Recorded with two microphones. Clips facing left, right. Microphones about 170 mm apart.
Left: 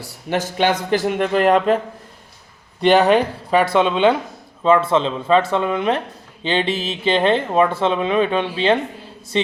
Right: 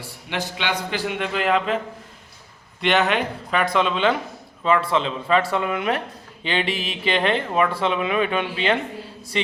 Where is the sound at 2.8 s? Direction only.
35° left (ahead or behind).